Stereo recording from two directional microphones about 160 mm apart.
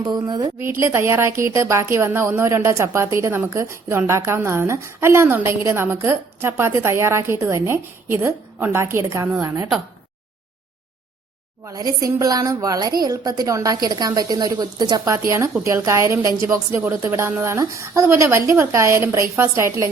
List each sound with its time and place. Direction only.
0.0 s a woman's voice: 25° right (ahead or behind)
0.6 s a woman's voice: 15° right (ahead or behind)
11.6 s a woman's voice: 20° right (ahead or behind)